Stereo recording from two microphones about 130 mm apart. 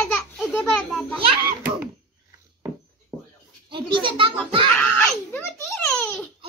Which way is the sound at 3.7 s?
40° right (ahead or behind).